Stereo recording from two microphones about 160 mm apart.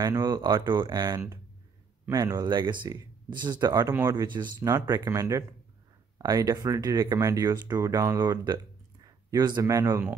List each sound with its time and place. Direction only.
0.0 s speech: 25° right (ahead or behind)